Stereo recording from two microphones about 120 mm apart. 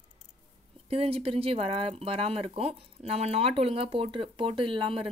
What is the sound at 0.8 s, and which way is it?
Speech, 55° right (ahead or behind).